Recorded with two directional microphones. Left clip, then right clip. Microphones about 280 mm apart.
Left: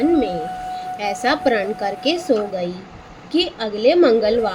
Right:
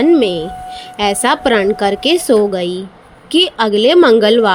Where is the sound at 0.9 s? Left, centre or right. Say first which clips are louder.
Right 7 dB; right.